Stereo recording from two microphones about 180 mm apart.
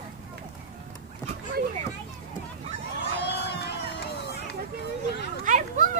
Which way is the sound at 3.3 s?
65° left (ahead or behind).